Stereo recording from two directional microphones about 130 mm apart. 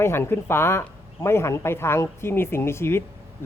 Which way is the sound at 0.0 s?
20° left (ahead or behind).